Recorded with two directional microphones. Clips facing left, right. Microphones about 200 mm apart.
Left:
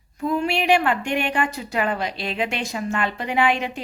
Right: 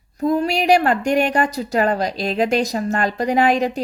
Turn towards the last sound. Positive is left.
turn(degrees=-40)  # may be behind; listen again after turning